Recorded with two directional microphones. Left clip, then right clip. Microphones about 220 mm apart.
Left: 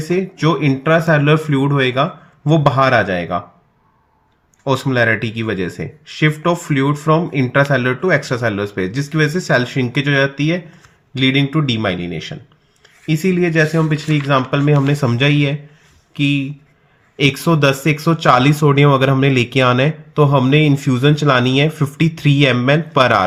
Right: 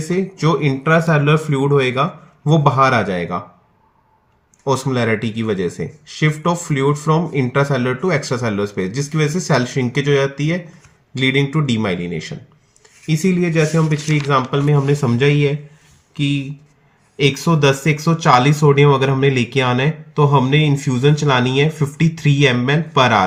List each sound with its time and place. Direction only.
0.1 s speech: 45° left (ahead or behind)
4.6 s speech: 45° left (ahead or behind)